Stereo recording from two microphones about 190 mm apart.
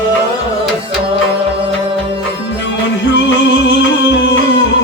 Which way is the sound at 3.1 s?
70° left (ahead or behind).